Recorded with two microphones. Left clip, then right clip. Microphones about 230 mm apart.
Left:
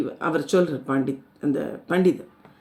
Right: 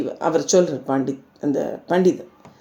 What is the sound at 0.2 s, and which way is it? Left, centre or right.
Speech, left.